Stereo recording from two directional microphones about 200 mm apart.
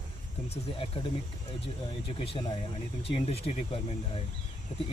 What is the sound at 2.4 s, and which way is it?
Speech, 25° left (ahead or behind).